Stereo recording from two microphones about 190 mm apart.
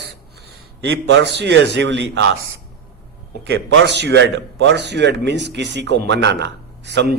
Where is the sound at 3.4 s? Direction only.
75° right (ahead or behind).